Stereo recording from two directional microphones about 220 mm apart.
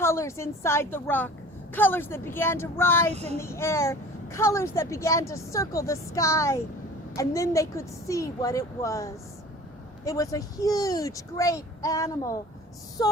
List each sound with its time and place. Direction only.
0.0 s speech: 10° left (ahead or behind)
3.1 s speech: 30° right (ahead or behind)
3.3 s speech: 10° left (ahead or behind)
13.0 s a sound: 20° left (ahead or behind)